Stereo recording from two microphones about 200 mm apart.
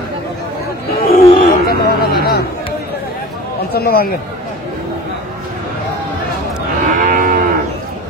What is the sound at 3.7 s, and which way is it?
Speech, 50° left (ahead or behind).